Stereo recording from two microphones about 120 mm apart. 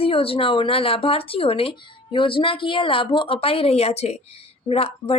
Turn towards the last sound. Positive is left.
turn(degrees=55)  # may be behind; listen again after turning